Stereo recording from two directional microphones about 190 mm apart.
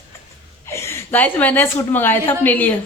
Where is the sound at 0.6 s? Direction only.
15° left (ahead or behind).